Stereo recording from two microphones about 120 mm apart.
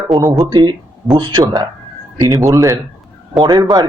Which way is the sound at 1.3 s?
40° right (ahead or behind).